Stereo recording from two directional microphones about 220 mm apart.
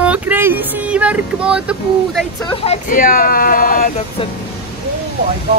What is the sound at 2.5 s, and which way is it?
Speech, 25° left (ahead or behind).